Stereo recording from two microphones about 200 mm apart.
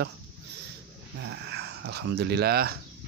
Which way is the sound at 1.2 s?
60° right (ahead or behind).